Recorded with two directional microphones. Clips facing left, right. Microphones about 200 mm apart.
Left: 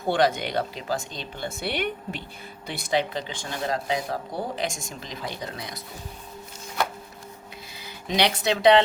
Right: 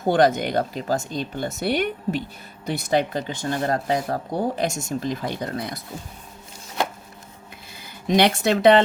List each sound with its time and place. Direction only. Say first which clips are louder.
0.1 s speech: right 4 dB; 45° right (ahead or behind)
7.8 s speech: right 6 dB; 50° right (ahead or behind)